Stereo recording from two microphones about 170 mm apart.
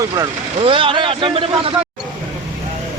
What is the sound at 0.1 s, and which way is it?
Speech, 30° right (ahead or behind).